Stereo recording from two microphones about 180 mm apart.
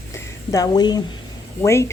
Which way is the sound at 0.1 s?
20° left (ahead or behind).